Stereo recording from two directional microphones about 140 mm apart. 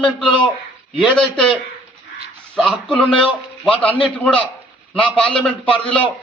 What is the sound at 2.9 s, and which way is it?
A man's voice, 5° left (ahead or behind).